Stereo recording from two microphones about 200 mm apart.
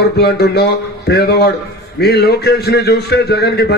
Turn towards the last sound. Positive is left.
turn(degrees=55)  # may be behind; listen again after turning